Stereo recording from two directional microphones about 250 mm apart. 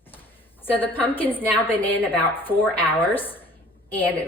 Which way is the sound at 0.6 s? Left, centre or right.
Centre.